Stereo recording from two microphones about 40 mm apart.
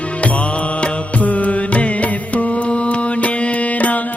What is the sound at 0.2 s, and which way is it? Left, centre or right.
Music, left.